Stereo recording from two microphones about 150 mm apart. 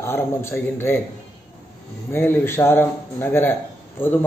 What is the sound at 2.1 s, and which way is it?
A man's voice, 15° left (ahead or behind).